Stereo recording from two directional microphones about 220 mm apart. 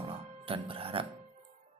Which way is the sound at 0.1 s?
25° right (ahead or behind).